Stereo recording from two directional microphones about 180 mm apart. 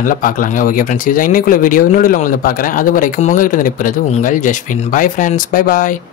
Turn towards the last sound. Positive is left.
turn(degrees=50)  # may be behind; listen again after turning